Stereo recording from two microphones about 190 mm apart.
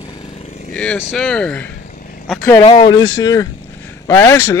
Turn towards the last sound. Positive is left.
turn(degrees=15)  # may be behind; listen again after turning